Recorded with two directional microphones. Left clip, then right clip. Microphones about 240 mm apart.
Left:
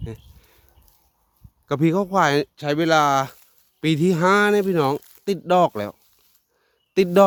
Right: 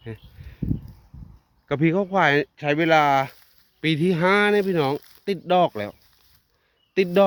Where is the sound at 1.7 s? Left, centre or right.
Centre.